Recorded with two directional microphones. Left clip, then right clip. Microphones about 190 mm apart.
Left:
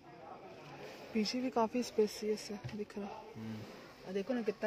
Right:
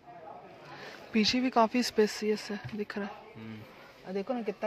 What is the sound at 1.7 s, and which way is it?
Speech, 40° right (ahead or behind).